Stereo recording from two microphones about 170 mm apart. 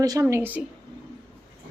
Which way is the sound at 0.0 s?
20° right (ahead or behind).